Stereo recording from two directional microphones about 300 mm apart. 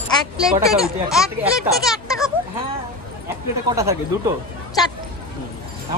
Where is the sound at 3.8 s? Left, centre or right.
Centre.